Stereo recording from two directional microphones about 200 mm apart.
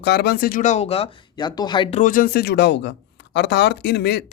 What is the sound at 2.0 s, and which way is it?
Speech, 45° left (ahead or behind).